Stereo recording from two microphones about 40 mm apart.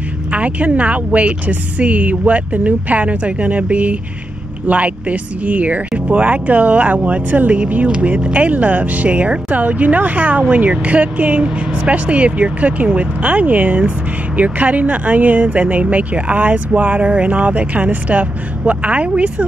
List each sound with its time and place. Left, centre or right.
0.3 s a woman's voice: right